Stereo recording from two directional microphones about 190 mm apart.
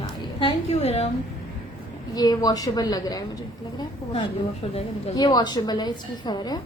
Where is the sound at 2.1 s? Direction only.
20° left (ahead or behind).